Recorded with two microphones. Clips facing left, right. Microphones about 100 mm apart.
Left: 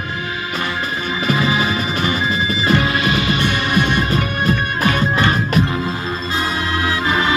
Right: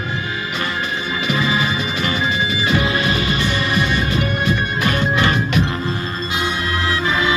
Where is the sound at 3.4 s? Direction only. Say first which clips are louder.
Left 2 dB; 55° left (ahead or behind).